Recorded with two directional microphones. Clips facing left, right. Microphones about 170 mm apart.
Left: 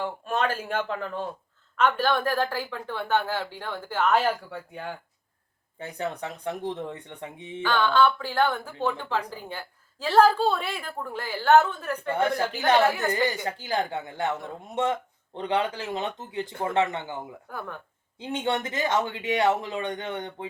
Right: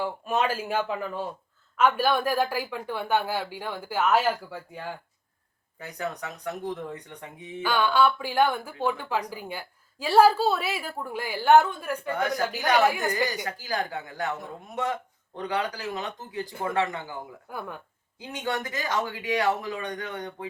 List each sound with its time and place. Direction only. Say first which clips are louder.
0.0 s a woman's voice: right 1 dB; 5° right (ahead or behind)
5.8 s speech: left 2 dB; 30° left (ahead or behind)
7.6 s a woman's voice: left 1 dB; 10° right (ahead or behind)
12.1 s speech: left 3 dB; 30° left (ahead or behind)
12.8 s a woman's voice: even; 15° right (ahead or behind)
13.3 s speech: left 2 dB; 25° left (ahead or behind)
15.4 s speech: left 3 dB; 25° left (ahead or behind)
17.5 s a woman's voice: right 1 dB; 10° right (ahead or behind)
18.2 s speech: left 3 dB; 25° left (ahead or behind)